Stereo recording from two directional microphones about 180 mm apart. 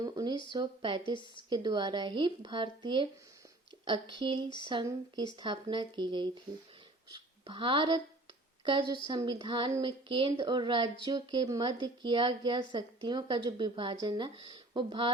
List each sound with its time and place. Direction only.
0.0 s speech: 20° right (ahead or behind)
9.0 s speech: 25° right (ahead or behind)